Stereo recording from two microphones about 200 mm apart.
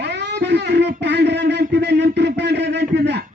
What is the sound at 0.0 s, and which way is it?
Speech, 60° right (ahead or behind).